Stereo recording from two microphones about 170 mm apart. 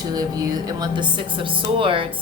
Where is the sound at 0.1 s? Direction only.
20° right (ahead or behind).